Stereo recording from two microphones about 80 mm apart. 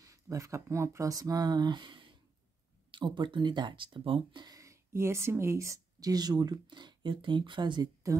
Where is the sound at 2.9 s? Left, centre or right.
Right.